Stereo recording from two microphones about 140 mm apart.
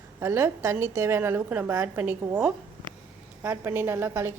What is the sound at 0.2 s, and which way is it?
A woman's voice, 20° right (ahead or behind).